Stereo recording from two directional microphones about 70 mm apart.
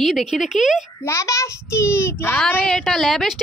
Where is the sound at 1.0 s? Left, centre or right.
Left.